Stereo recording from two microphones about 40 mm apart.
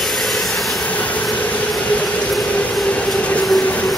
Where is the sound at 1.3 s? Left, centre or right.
Left.